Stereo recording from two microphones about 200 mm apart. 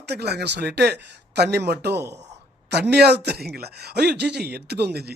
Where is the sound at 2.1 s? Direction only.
35° right (ahead or behind).